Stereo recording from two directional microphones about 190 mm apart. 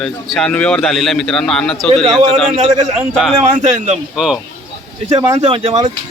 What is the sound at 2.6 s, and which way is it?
Speech, 35° right (ahead or behind).